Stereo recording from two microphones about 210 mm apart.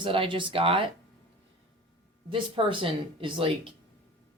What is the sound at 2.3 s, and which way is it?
Speech, 25° right (ahead or behind).